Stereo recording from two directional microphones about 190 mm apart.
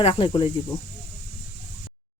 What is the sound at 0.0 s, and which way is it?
Speech, 30° left (ahead or behind).